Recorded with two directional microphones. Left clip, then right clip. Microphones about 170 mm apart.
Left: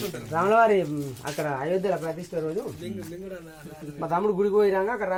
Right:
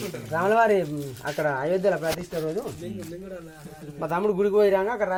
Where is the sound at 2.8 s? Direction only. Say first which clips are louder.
Even; 20° right (ahead or behind).